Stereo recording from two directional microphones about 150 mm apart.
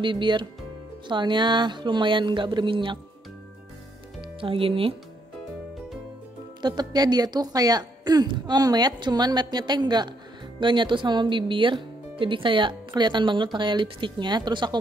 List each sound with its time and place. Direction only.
0.0 s speech: 30° right (ahead or behind)
4.2 s speech: 35° right (ahead or behind)
6.6 s speech: 30° right (ahead or behind)